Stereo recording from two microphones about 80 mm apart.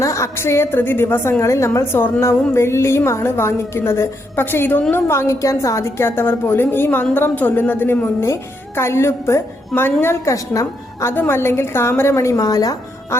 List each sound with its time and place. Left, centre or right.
0.0 s a woman's voice: left
1.4 s a woman's voice: left
11.1 s a woman's voice: left